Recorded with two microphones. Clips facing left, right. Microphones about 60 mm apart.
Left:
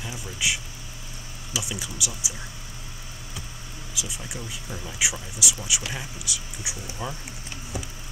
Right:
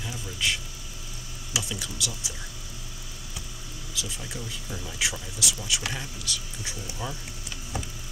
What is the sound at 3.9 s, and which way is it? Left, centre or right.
Speech, centre.